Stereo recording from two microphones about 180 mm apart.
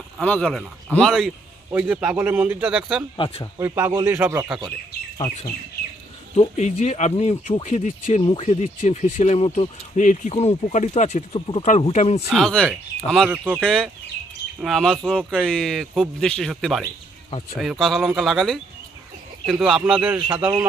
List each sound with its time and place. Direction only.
0.2 s a man's voice: 5° left (ahead or behind)
3.2 s speech: 25° left (ahead or behind)
3.6 s a man's voice: 15° right (ahead or behind)
6.3 s speech: 40° left (ahead or behind)
12.3 s a man's voice: 5° left (ahead or behind)